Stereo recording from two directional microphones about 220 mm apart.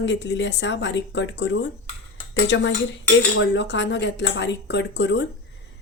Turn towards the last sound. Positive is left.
turn(degrees=50)  # may be behind; listen again after turning